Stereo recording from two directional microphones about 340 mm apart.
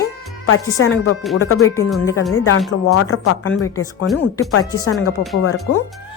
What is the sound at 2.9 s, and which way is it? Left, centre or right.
Speech, left.